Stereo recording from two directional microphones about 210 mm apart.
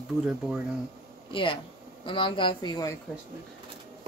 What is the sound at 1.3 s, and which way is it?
A woman's voice, 25° left (ahead or behind).